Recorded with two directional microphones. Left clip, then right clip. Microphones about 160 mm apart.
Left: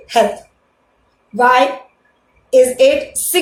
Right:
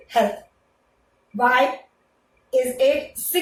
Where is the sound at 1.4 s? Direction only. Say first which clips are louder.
Left 7 dB; 40° left (ahead or behind).